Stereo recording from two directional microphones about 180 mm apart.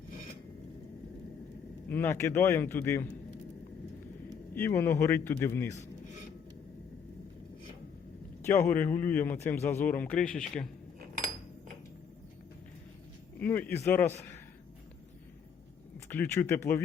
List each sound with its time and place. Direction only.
1.9 s a man's voice: 15° left (ahead or behind)
4.5 s a man's voice: 10° left (ahead or behind)
8.4 s a man's voice: 15° left (ahead or behind)
13.4 s a man's voice: 10° left (ahead or behind)
16.0 s a man's voice: 10° left (ahead or behind)